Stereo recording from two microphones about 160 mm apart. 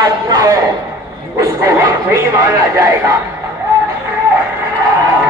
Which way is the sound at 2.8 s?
20° right (ahead or behind).